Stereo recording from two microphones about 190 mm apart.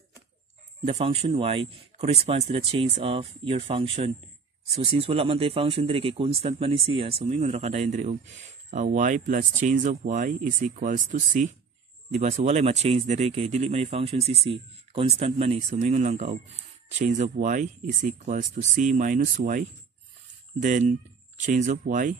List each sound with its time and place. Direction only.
0.8 s speech: 35° right (ahead or behind)
20.6 s speech: 40° right (ahead or behind)